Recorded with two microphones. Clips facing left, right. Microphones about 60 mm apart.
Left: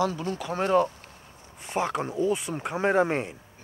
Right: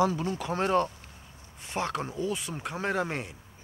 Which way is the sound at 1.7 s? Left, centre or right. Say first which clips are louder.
Left 4 dB; centre.